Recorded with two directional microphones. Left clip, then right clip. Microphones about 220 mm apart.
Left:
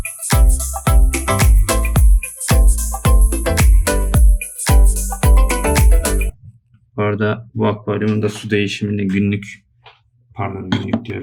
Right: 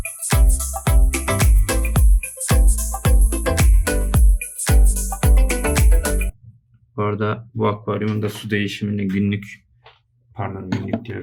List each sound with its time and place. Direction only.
0.0 s music: centre (ahead or behind)
6.9 s speech: centre (ahead or behind)
10.7 s speech: 25° left (ahead or behind)